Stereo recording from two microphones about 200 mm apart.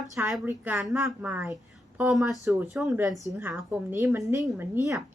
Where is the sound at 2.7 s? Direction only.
Centre (ahead or behind).